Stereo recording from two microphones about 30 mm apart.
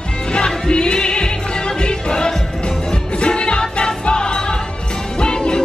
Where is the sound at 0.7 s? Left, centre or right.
Left.